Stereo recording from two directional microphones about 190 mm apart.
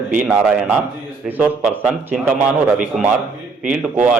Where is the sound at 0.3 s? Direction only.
5° right (ahead or behind).